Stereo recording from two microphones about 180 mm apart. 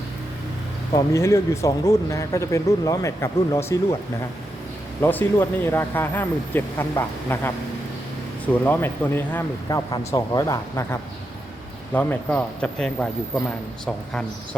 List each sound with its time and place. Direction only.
0.9 s speech: 15° left (ahead or behind)
4.9 s speech: 10° left (ahead or behind)
8.6 s speech: 10° left (ahead or behind)
11.9 s a man's voice: 10° left (ahead or behind)